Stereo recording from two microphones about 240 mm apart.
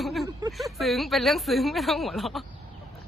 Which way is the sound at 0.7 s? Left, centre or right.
Centre.